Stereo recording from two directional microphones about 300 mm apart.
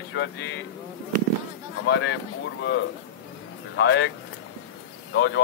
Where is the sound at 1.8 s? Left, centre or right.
Left.